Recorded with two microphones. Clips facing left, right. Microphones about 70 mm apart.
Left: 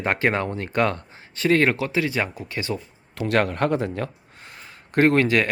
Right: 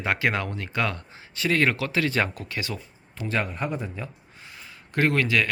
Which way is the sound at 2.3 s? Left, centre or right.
Left.